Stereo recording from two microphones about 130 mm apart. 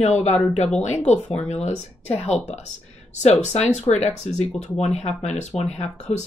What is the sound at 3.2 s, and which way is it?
Speech, 60° left (ahead or behind).